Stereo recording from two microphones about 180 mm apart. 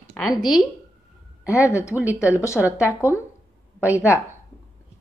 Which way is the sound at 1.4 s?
5° right (ahead or behind).